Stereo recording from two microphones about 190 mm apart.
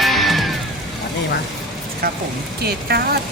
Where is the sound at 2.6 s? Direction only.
55° right (ahead or behind).